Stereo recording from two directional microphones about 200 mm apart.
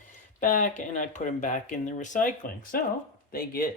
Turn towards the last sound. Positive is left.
turn(degrees=45)  # may be behind; listen again after turning